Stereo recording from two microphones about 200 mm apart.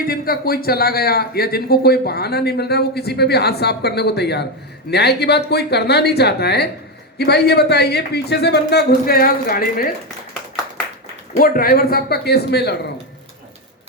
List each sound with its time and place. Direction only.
0.0 s a man's voice: 50° left (ahead or behind)
11.3 s a man's voice: 45° left (ahead or behind)